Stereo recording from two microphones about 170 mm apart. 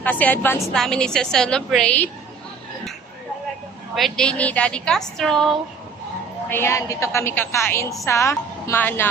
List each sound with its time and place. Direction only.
0.0 s a woman's voice: 10° left (ahead or behind)
3.9 s a woman's voice: 5° left (ahead or behind)
6.5 s a woman's voice: 15° left (ahead or behind)